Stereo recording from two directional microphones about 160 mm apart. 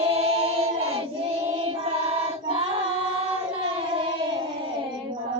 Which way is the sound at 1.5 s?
35° right (ahead or behind).